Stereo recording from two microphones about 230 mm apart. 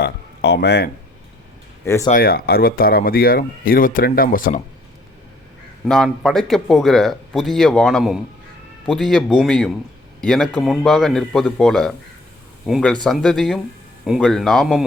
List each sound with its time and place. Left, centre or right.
0.0 s a sound: left
1.8 s speech: centre
2.0 s speech: left
5.8 s speech: centre